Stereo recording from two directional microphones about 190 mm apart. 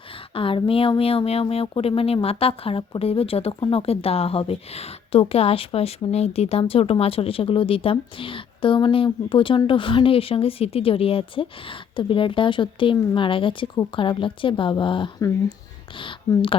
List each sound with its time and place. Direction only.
0.3 s speech: 30° left (ahead or behind)